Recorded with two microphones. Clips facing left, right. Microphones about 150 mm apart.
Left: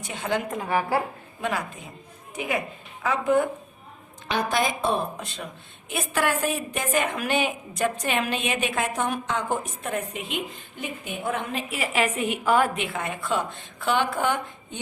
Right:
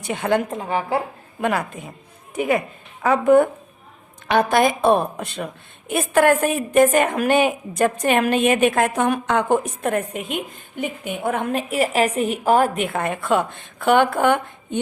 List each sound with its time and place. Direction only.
0.0 s a woman's voice: 60° right (ahead or behind)
0.5 s a woman's voice: 25° right (ahead or behind)
1.4 s a woman's voice: 55° right (ahead or behind)
3.0 s a woman's voice: 55° right (ahead or behind)